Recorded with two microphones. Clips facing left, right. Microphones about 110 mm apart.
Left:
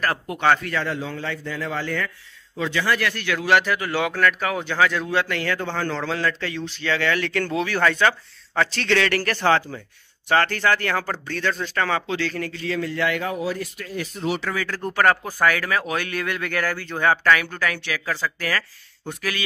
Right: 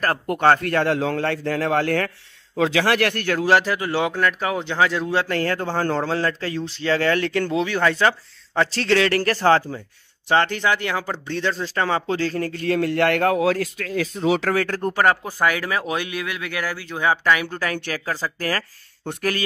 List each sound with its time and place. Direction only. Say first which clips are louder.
0.0 s speech: right 3 dB; 45° right (ahead or behind)
0.9 s a man's voice: right 7 dB; 70° right (ahead or behind); by 3.3 s 55° right (ahead or behind)
3.3 s speech: right 1 dB; 35° right (ahead or behind)
7.4 s speech: right 1 dB; 20° right (ahead or behind)
10.2 s speech: right 1 dB; 20° right (ahead or behind); by 12.5 s 40° right (ahead or behind)
12.5 s a man's voice: right 7 dB; 55° right (ahead or behind)
15.0 s speech: left 1 dB; 25° right (ahead or behind)
16.2 s speech: left 2 dB; 5° right (ahead or behind)
17.5 s speech: right 1 dB; 30° right (ahead or behind)